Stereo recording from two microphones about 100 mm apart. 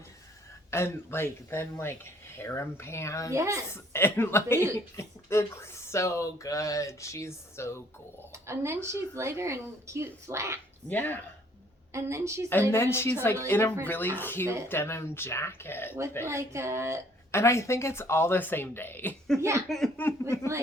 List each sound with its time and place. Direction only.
0.7 s speech: 25° left (ahead or behind)
3.3 s speech: 30° right (ahead or behind)
3.7 s speech: 25° left (ahead or behind)
8.3 s speech: 30° right (ahead or behind)
10.8 s speech: 20° left (ahead or behind)
11.9 s speech: 30° right (ahead or behind)
12.7 s speech: 25° left (ahead or behind)
14.4 s speech: 25° right (ahead or behind)
14.7 s speech: 25° left (ahead or behind)
16.2 s speech: 30° right (ahead or behind)
17.3 s speech: 30° left (ahead or behind)
19.4 s speech: 30° right (ahead or behind)
19.6 s speech: 5° left (ahead or behind)
20.0 s speech: 25° left (ahead or behind)